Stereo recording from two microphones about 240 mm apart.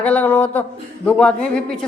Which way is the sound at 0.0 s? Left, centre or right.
Centre.